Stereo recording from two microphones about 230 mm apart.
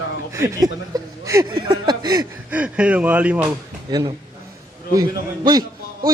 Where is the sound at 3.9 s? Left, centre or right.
Centre.